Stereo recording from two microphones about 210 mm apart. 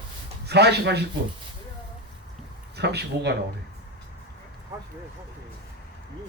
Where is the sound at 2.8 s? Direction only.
50° right (ahead or behind).